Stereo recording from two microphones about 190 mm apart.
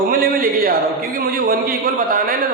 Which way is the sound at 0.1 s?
45° right (ahead or behind).